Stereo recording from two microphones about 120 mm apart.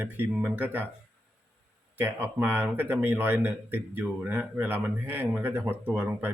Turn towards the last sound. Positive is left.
turn(degrees=-15)  # may be behind; listen again after turning